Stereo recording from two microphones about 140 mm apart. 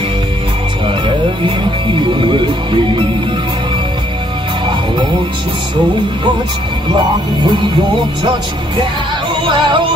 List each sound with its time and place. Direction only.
0.8 s music: 35° right (ahead or behind)
2.2 s speech: 35° right (ahead or behind)
8.2 s speech: 30° right (ahead or behind)